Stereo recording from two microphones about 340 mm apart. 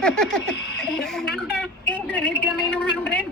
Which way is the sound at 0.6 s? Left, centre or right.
Left.